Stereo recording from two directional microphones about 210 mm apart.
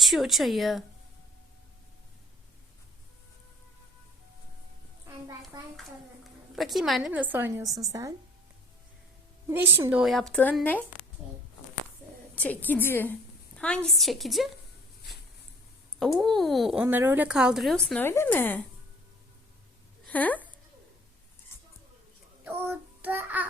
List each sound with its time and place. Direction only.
0.0 s speech: centre (ahead or behind)
5.5 s a woman's voice: 20° right (ahead or behind)
6.6 s a woman's voice: centre (ahead or behind); by 8.1 s 15° right (ahead or behind)
9.5 s speech: 10° right (ahead or behind); by 10.8 s 10° left (ahead or behind)
12.4 s a woman's voice: 5° left (ahead or behind)
16.0 s speech: centre (ahead or behind)
20.1 s speech: 5° left (ahead or behind)
22.4 s child singing: 10° right (ahead or behind)